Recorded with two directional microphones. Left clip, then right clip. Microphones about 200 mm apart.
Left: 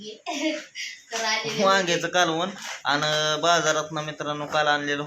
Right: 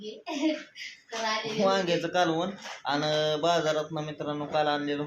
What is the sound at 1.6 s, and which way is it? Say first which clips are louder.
Speech: left 5 dB; 15° left (ahead or behind).